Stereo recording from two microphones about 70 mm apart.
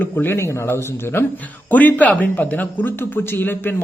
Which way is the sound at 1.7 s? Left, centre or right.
Left.